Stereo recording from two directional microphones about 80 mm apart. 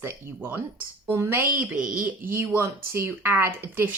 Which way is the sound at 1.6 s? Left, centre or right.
Right.